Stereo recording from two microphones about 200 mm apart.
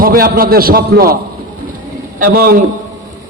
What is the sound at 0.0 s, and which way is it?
A man's voice, 45° right (ahead or behind).